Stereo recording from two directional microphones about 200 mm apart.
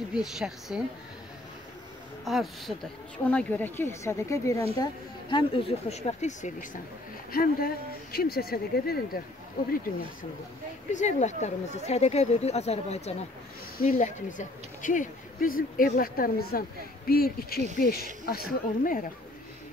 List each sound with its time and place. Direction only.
0.1 s a woman's voice: centre (ahead or behind)
2.2 s a woman's voice: centre (ahead or behind)
5.3 s speech: 30° left (ahead or behind)
7.3 s speech: 50° left (ahead or behind)
10.9 s speech: 35° left (ahead or behind)